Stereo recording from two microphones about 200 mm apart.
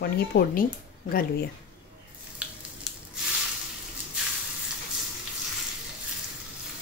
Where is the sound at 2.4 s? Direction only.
5° right (ahead or behind).